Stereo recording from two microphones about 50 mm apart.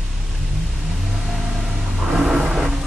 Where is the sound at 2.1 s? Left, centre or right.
Centre.